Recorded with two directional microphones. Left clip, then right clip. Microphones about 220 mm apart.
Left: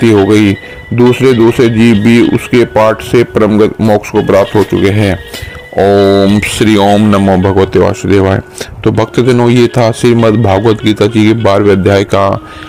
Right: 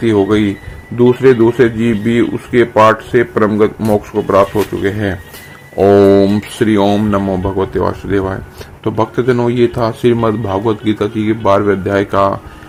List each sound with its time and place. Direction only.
0.0 s speech: 35° left (ahead or behind)
5.8 s a man's voice: 25° left (ahead or behind)